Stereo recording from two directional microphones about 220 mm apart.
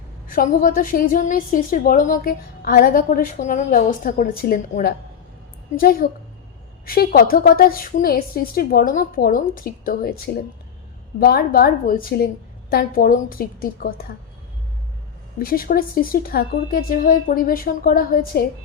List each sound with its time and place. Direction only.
0.3 s a woman's voice: 40° left (ahead or behind)
11.2 s a woman's voice: 45° left (ahead or behind)
15.4 s a woman's voice: 40° left (ahead or behind)